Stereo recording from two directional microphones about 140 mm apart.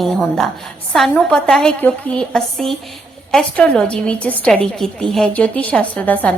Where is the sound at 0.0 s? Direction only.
Centre (ahead or behind).